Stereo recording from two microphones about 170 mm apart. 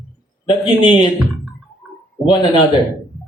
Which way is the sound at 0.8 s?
30° left (ahead or behind).